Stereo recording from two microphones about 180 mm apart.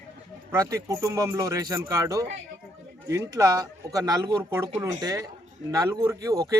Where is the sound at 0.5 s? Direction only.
20° right (ahead or behind).